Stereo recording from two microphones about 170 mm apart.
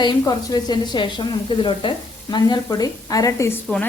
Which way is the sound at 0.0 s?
25° left (ahead or behind).